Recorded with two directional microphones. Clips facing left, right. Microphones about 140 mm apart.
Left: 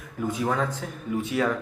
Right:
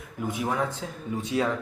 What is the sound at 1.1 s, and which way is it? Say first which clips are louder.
Speech: left 4 dB; 25° right (ahead or behind).